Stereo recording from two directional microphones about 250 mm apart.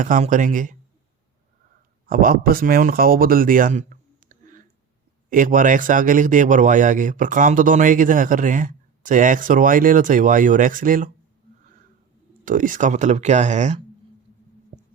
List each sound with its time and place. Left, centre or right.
0.0 s speech: right
2.0 s speech: right
12.5 s speech: right